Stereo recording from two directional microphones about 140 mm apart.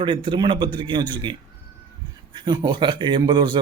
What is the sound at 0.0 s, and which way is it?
A man's voice, 35° right (ahead or behind).